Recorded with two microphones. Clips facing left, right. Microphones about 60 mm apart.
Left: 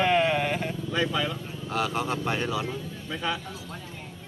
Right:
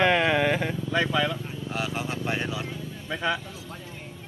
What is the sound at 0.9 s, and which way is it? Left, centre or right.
Speech, right.